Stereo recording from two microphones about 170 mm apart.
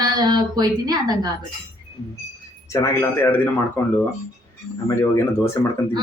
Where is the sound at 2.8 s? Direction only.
10° left (ahead or behind).